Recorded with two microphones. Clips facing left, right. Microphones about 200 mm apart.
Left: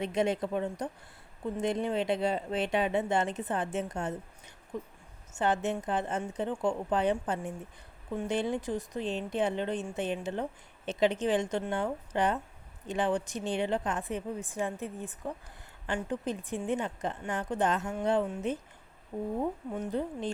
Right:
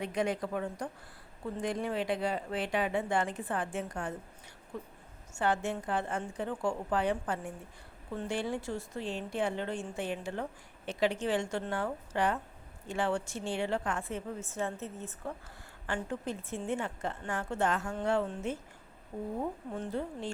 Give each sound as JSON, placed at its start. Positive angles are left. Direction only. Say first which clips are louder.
{"t": 0.0, "sound": "speech", "louder": "left 3 dB", "side_deg": 25}
{"t": 5.3, "sound": "a woman's voice", "louder": "left 2 dB", "side_deg": 20}
{"t": 19.7, "sound": "a woman's voice", "louder": "left 3 dB", "side_deg": 15}